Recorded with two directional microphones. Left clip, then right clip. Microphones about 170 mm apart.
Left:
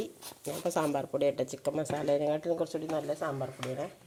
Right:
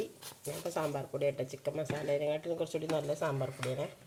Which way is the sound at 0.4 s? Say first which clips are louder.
Left 5 dB; 45° left (ahead or behind).